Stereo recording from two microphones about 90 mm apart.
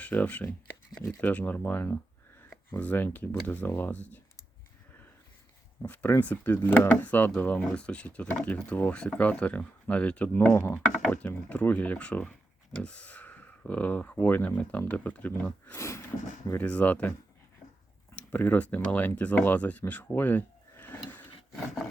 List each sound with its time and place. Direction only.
0.0 s speech: 15° left (ahead or behind)
5.8 s speech: 20° left (ahead or behind)
11.0 s speech: 15° left (ahead or behind)
15.7 s a sound: 30° left (ahead or behind)
16.6 s speech: 15° left (ahead or behind)
18.1 s speech: 15° left (ahead or behind)